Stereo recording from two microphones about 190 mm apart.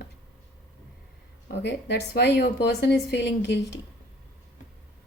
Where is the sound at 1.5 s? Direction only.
65° left (ahead or behind).